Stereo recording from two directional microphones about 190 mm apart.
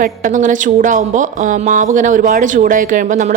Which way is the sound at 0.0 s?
45° right (ahead or behind).